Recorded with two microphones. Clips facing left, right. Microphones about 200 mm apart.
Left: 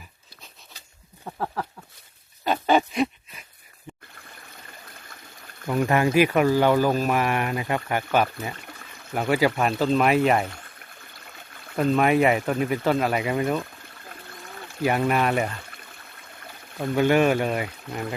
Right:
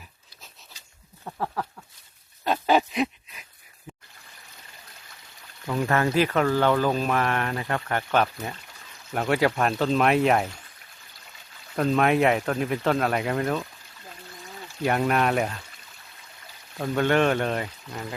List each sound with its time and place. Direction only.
1.2 s a sound: centre (ahead or behind)
5.6 s speech: 10° left (ahead or behind)
11.0 s trickle: 55° left (ahead or behind)
11.8 s speech: centre (ahead or behind)
14.8 s speech: centre (ahead or behind)
16.7 s speech: centre (ahead or behind)
17.9 s speech: 55° left (ahead or behind)